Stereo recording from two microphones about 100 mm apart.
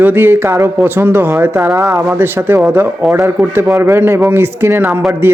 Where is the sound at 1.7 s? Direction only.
30° right (ahead or behind).